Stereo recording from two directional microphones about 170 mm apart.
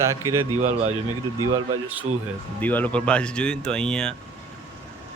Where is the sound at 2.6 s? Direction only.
10° left (ahead or behind).